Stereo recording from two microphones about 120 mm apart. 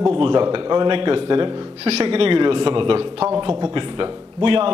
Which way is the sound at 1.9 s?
55° right (ahead or behind).